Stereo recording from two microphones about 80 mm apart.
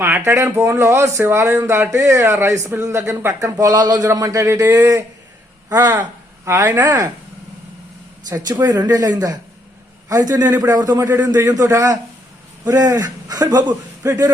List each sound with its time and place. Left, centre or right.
0.0 s speech: right
5.8 s a man's voice: right
6.4 s speech: right
6.8 s a man's voice: right
8.6 s a man's voice: right